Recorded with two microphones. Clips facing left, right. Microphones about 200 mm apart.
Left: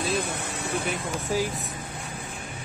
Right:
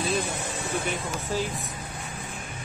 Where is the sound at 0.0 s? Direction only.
55° left (ahead or behind).